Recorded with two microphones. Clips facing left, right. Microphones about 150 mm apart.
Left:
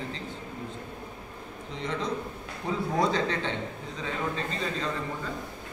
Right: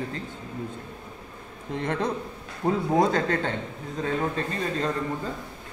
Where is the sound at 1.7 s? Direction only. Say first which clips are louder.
Right 5 dB; 55° right (ahead or behind).